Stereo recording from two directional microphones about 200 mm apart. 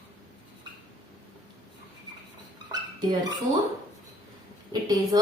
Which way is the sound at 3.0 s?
20° right (ahead or behind).